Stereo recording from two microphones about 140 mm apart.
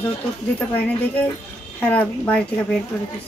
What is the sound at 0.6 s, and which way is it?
Speech, 10° left (ahead or behind).